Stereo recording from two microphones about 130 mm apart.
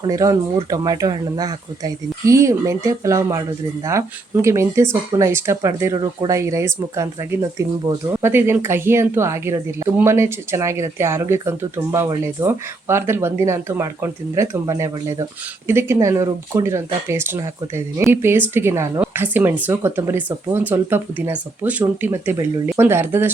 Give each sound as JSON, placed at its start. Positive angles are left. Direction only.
{"t": 0.1, "sound": "speech", "side_deg": -25}